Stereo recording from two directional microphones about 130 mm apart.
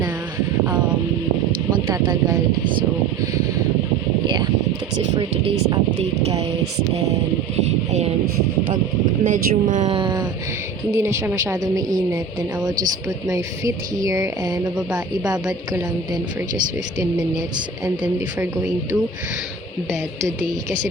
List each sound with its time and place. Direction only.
1.9 s speech: 30° right (ahead or behind)
9.2 s speech: 85° right
9.9 s speech: 35° right (ahead or behind)
10.9 s speech: 20° right (ahead or behind)
13.2 s speech: 25° right (ahead or behind)
18.0 s speech: 15° right (ahead or behind)